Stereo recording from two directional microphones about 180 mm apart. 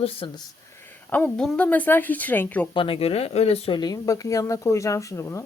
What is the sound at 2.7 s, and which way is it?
A woman's voice, 30° left (ahead or behind).